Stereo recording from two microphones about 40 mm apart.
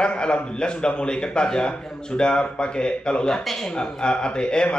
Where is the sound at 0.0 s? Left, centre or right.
Left.